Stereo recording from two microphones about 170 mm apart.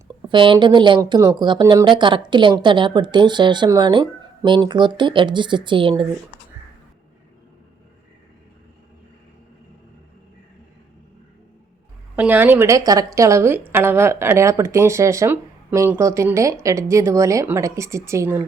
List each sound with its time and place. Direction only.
0.3 s speech: 30° right (ahead or behind)
12.1 s a woman's voice: 10° right (ahead or behind)